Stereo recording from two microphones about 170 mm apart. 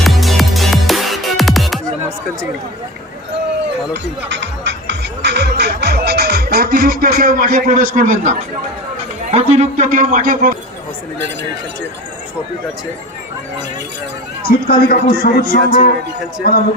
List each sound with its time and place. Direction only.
0.0 s music: centre (ahead or behind)
4.3 s music: 90° right; by 8.3 s 50° right (ahead or behind)
9.3 s a man's voice: 40° right (ahead or behind)
14.7 s a man's voice: 60° left (ahead or behind)